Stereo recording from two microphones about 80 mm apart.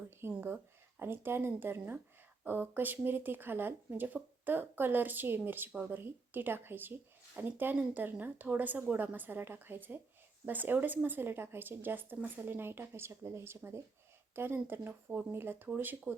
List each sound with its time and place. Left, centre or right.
0.4 s speech: right